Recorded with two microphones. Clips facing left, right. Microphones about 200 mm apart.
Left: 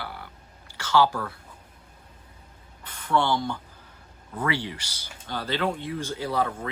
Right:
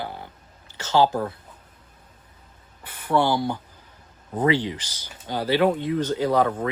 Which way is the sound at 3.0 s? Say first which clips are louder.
Right 3 dB; 10° right (ahead or behind).